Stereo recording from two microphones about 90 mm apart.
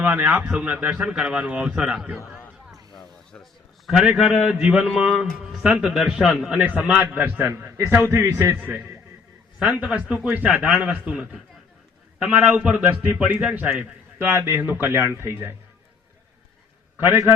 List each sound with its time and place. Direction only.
0.0 s speech: 20° right (ahead or behind)
3.8 s a man's voice: 5° right (ahead or behind)
6.6 s a man's voice: 15° right (ahead or behind)